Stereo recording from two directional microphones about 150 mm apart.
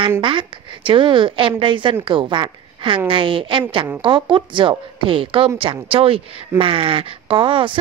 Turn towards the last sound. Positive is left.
turn(degrees=-35)  # may be behind; listen again after turning